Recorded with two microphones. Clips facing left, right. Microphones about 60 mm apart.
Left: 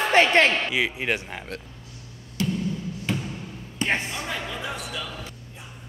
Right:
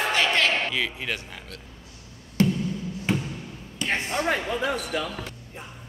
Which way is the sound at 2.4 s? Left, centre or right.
Right.